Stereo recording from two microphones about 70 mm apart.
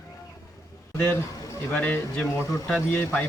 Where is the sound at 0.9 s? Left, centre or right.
Left.